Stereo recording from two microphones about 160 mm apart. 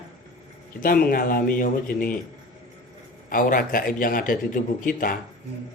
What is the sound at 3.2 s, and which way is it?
Speech, 60° left (ahead or behind).